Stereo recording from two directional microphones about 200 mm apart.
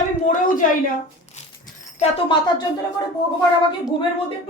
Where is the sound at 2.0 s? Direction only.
25° left (ahead or behind).